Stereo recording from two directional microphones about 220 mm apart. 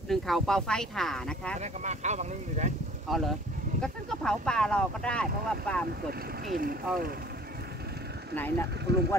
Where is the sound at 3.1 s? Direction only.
Centre (ahead or behind).